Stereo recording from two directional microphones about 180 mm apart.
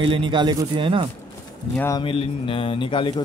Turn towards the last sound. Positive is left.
turn(degrees=25)  # may be behind; listen again after turning